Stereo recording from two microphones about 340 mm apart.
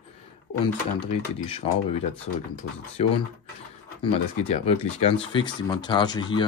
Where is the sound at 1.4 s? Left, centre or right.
Centre.